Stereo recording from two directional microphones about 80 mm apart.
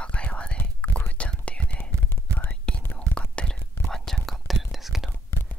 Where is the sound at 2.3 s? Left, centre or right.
Right.